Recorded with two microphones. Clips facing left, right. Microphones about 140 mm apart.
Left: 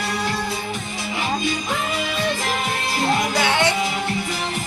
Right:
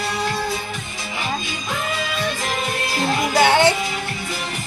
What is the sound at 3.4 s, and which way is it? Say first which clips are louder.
Music: right 9 dB; 30° right (ahead or behind).